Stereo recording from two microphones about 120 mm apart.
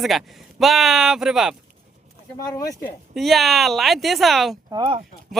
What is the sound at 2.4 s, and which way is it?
Speech, 30° left (ahead or behind).